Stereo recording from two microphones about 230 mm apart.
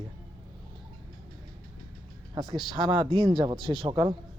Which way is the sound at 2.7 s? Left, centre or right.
Centre.